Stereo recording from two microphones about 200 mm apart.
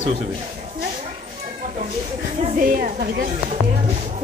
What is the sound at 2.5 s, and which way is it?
Speech, 45° right (ahead or behind).